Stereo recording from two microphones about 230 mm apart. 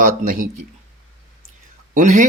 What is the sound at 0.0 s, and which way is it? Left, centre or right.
Speech, right.